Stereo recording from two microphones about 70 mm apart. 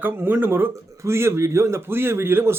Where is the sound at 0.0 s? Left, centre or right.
Right.